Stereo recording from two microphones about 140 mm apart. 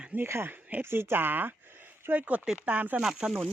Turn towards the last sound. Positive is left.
turn(degrees=-5)  # may be behind; listen again after turning